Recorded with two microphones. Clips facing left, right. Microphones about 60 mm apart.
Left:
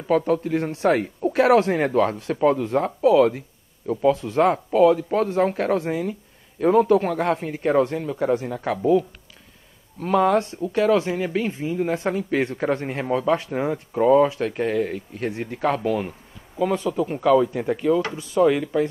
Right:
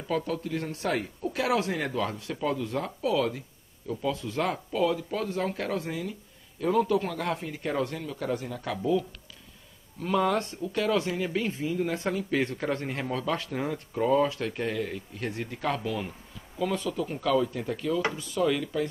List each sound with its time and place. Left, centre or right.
0.1 s speech: left
10.0 s speech: left
16.5 s speech: left